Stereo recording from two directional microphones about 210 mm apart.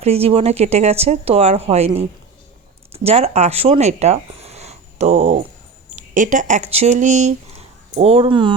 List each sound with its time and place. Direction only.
0.0 s speech: 30° right (ahead or behind)